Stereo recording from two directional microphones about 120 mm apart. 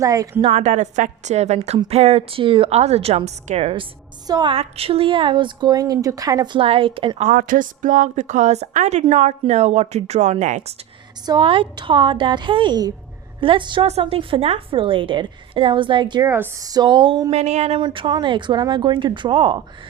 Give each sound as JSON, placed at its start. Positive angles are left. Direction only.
{"t": 0.0, "sound": "a woman's voice", "side_deg": -30}
{"t": 0.4, "sound": "a woman's voice", "side_deg": -70}
{"t": 4.3, "sound": "a woman's voice", "side_deg": -35}
{"t": 4.5, "sound": "a woman's voice", "side_deg": -55}
{"t": 7.2, "sound": "a woman's voice", "side_deg": -90}
{"t": 11.3, "sound": "a woman's voice", "side_deg": -45}
{"t": 13.8, "sound": "a woman's voice", "side_deg": -55}
{"t": 16.2, "sound": "a woman's voice", "side_deg": -25}
{"t": 17.3, "sound": "a woman's voice", "side_deg": -65}
{"t": 17.7, "sound": "a woman's voice", "side_deg": -45}